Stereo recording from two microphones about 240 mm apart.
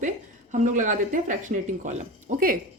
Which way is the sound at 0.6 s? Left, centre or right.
Right.